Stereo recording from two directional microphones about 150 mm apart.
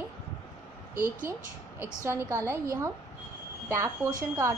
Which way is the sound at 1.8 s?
15° right (ahead or behind).